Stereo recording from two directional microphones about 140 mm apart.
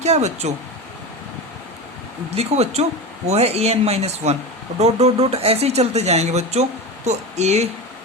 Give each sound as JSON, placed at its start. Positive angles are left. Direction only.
{"t": 0.0, "sound": "speech", "side_deg": -55}
{"t": 2.3, "sound": "speech", "side_deg": -50}